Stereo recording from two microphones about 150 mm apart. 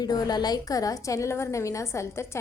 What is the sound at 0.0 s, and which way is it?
A woman's voice, 25° left (ahead or behind).